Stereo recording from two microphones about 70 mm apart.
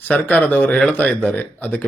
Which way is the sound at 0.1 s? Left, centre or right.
Left.